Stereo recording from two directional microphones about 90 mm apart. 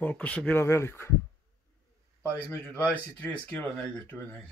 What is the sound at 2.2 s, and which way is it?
Speech, 15° left (ahead or behind).